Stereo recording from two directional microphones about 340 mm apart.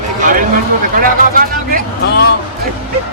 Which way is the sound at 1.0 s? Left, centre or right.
Right.